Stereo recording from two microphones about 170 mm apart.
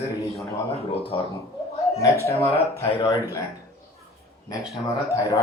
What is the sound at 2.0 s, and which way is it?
Speech, 20° left (ahead or behind).